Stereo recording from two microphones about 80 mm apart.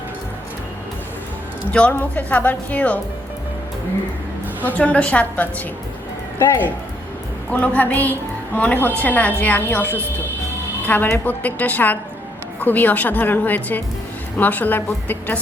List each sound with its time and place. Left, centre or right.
1.9 s a woman's voice: left
4.6 s a woman's voice: centre
7.5 s a woman's voice: left